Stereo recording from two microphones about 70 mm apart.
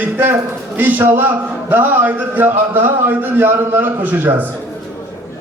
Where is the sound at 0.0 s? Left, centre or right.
Right.